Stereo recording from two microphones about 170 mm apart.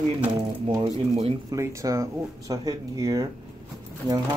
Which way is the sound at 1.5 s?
15° right (ahead or behind).